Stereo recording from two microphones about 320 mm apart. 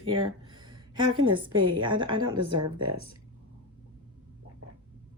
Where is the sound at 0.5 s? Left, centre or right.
Centre.